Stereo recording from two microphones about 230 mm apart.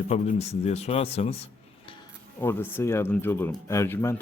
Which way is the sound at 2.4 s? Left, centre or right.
Centre.